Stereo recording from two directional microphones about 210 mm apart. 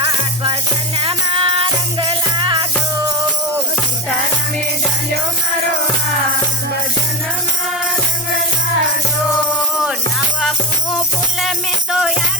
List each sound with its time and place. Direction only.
1.0 s music: 25° right (ahead or behind)
10.9 s music: centre (ahead or behind)